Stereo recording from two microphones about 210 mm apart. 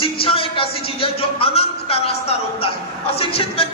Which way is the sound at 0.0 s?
25° left (ahead or behind).